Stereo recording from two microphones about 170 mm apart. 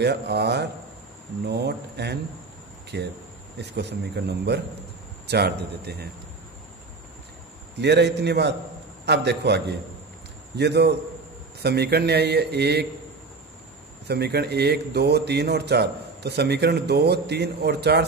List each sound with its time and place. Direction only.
0.0 s a man's voice: 75° right (ahead or behind)
7.7 s a man's voice: 80° right
14.0 s a man's voice: 75° right (ahead or behind)